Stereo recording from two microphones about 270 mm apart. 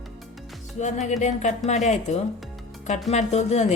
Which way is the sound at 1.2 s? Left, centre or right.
Left.